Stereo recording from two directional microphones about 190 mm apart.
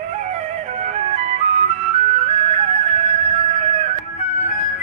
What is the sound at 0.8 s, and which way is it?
Music, 40° right (ahead or behind).